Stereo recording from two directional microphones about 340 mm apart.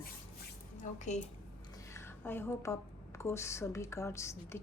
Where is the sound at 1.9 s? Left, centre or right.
Centre.